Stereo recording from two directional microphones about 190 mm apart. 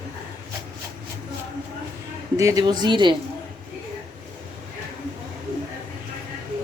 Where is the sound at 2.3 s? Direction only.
15° right (ahead or behind).